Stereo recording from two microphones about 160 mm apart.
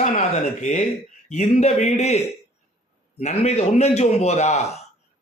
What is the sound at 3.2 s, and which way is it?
A man's voice, 40° left (ahead or behind).